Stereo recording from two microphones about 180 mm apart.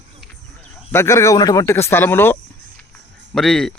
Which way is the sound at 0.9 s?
15° left (ahead or behind).